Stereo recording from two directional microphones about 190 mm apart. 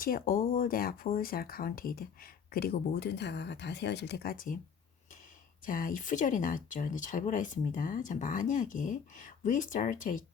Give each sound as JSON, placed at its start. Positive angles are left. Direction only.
{"t": 0.0, "sound": "speech", "side_deg": 50}
{"t": 5.6, "sound": "speech", "side_deg": 45}